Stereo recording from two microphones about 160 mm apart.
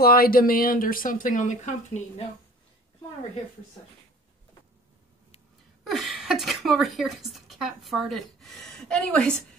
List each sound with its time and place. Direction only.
0.0 s speech: 70° left (ahead or behind); by 2.2 s 50° left (ahead or behind)
5.9 s speech: centre (ahead or behind)